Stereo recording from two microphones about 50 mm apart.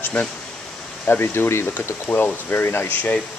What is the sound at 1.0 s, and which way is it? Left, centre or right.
Speech, left.